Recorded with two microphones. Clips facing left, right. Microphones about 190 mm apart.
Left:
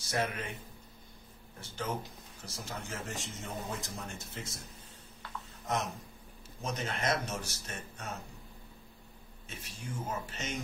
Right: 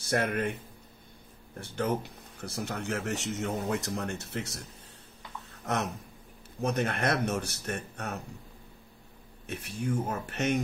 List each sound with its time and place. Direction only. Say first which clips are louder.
0.0 s a man's voice: right 6 dB; 55° right (ahead or behind)
1.6 s speech: right 7 dB; 60° right (ahead or behind)
5.7 s speech: right 3 dB; 65° right (ahead or behind)
9.5 s speech: right 12 dB; 60° right (ahead or behind)